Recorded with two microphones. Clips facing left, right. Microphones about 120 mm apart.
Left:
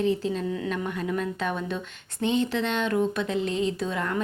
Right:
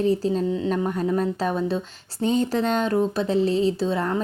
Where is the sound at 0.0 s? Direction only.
35° right (ahead or behind).